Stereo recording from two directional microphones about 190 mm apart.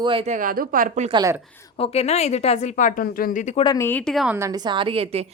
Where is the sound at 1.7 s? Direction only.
30° left (ahead or behind).